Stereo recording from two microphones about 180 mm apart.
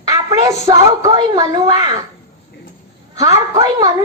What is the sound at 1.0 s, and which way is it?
Speech, 20° right (ahead or behind).